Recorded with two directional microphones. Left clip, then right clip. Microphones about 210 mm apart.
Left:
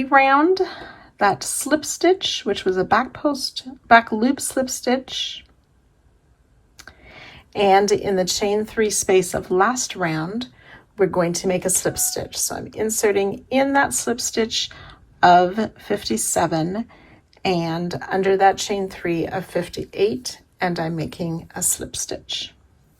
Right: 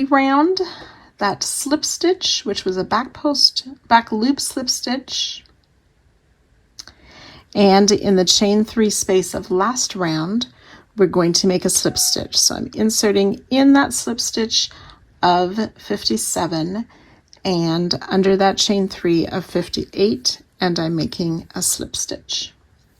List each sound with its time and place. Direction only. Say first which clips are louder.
0.0 s a woman's voice: left 1 dB; 20° right (ahead or behind)
6.7 s speech: right 2 dB; 15° right (ahead or behind)